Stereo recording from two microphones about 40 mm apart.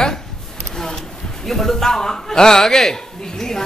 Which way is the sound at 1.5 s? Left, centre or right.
Centre.